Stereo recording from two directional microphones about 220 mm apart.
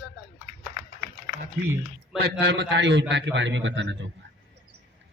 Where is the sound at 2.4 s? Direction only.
50° right (ahead or behind).